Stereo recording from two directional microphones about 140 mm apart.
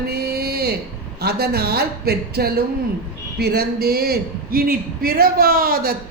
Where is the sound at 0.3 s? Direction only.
90° right.